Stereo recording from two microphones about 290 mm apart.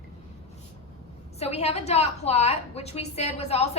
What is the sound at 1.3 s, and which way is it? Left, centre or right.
A woman's voice, left.